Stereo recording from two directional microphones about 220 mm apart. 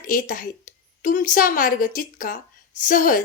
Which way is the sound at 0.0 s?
40° left (ahead or behind).